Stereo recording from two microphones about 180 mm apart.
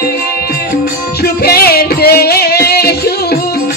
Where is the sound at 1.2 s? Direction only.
60° left (ahead or behind).